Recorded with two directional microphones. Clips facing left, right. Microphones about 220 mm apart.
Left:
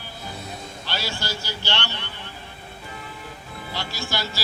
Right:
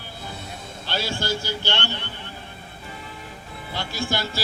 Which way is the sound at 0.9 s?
50° right (ahead or behind).